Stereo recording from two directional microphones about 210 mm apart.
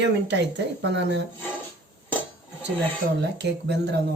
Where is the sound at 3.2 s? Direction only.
55° right (ahead or behind).